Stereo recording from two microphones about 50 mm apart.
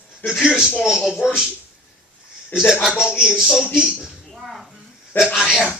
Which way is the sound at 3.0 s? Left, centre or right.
Centre.